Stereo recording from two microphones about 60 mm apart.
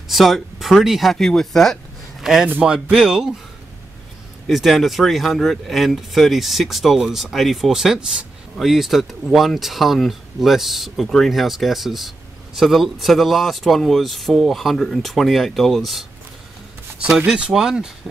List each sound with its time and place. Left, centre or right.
0.1 s speech: centre
1.1 s speech: centre
2.3 s speech: centre
4.5 s speech: centre
17.4 s speech: centre